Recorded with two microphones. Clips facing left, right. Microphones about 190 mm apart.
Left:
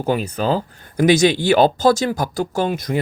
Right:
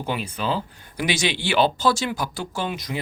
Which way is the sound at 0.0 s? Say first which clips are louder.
Left 7 dB; 45° left (ahead or behind).